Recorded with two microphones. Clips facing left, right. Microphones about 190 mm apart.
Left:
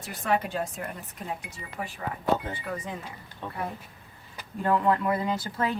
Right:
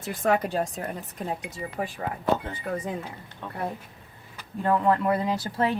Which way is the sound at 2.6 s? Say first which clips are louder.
Right 8 dB; 50° right (ahead or behind).